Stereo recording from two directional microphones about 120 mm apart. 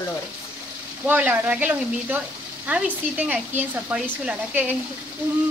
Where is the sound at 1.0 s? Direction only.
15° right (ahead or behind).